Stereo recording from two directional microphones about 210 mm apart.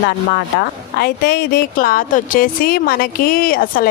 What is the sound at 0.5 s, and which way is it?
Speech, 50° left (ahead or behind).